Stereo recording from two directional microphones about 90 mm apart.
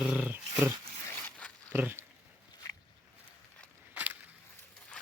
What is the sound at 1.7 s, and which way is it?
Speech, 25° right (ahead or behind).